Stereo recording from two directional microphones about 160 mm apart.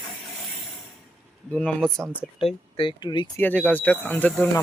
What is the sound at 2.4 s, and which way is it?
Speech, 35° left (ahead or behind).